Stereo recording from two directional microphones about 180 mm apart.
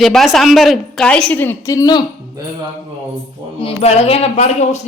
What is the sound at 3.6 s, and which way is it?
Speech, 35° left (ahead or behind).